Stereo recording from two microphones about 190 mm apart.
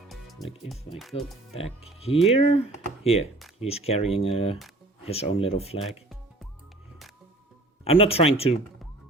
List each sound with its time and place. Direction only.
0.1 s music: centre (ahead or behind)
1.1 s speech: 30° left (ahead or behind)
7.9 s speech: 30° left (ahead or behind)